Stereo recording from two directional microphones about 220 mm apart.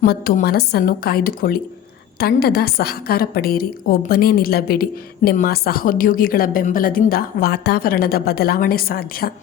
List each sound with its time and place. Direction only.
0.0 s a woman's voice: 40° left (ahead or behind)